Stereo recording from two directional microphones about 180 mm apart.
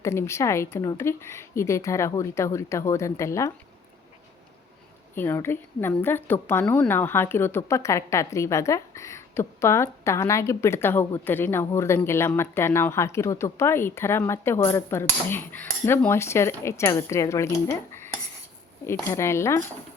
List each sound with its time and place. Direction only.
0.0 s a woman's voice: 15° left (ahead or behind)
5.1 s a woman's voice: 10° left (ahead or behind)